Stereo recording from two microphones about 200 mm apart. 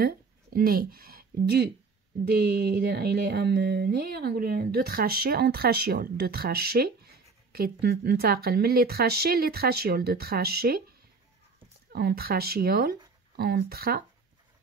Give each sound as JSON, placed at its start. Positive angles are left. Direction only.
{"t": 0.0, "sound": "speech", "side_deg": -50}
{"t": 11.9, "sound": "speech", "side_deg": -50}